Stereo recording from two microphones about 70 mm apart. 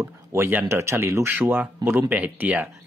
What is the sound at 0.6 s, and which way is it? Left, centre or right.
Speech, right.